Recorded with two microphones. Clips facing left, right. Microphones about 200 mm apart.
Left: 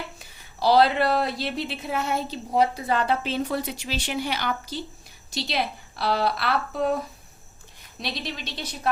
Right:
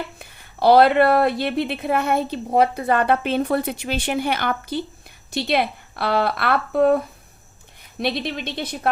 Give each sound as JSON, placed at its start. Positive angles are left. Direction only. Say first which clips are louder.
{"t": 0.2, "sound": "a woman's voice", "louder": "right 6 dB", "side_deg": -55}